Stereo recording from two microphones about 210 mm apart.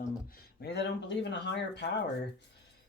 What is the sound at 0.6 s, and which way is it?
Speech, 55° left (ahead or behind).